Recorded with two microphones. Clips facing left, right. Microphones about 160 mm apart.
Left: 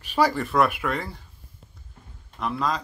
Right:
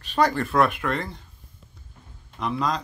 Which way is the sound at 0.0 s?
10° left (ahead or behind).